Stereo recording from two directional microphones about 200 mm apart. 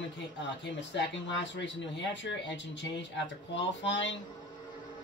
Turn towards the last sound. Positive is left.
turn(degrees=65)  # may be behind; listen again after turning